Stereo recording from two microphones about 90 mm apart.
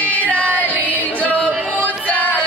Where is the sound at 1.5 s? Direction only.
20° right (ahead or behind).